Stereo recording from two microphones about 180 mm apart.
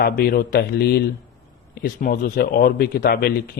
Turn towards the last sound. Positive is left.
turn(degrees=55)  # may be behind; listen again after turning